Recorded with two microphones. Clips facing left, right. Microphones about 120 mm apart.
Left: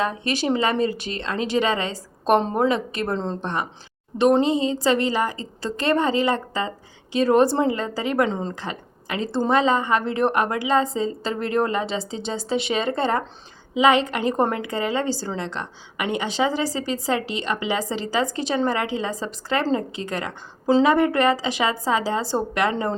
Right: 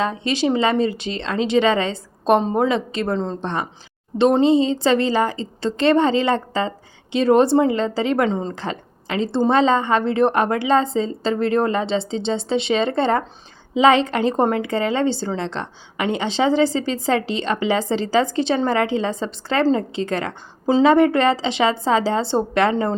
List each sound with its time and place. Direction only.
0.0 s a woman's voice: 25° right (ahead or behind)
8.3 s a woman's voice: 15° right (ahead or behind)
8.5 s a woman's voice: 30° right (ahead or behind)